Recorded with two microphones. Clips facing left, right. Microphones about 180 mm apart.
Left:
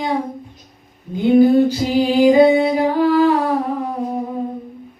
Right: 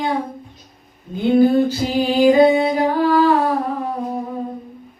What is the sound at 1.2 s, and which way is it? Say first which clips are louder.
Female singing: left 2 dB; 15° left (ahead or behind).